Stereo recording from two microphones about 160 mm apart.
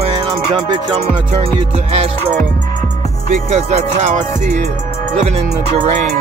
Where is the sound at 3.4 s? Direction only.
45° right (ahead or behind).